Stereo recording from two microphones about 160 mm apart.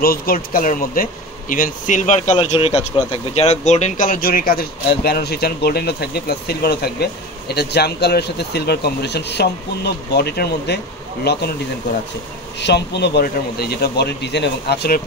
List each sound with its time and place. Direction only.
0.0 s speech: 70° left (ahead or behind); by 11.4 s 90° left
12.5 s speech: 90° left